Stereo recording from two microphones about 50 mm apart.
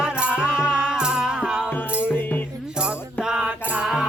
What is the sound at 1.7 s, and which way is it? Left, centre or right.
Music, left.